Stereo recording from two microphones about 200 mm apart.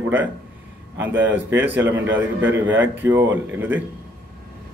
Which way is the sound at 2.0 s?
70° right (ahead or behind).